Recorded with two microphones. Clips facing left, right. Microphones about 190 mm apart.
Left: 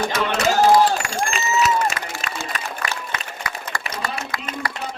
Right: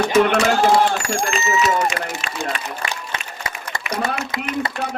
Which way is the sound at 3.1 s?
25° right (ahead or behind).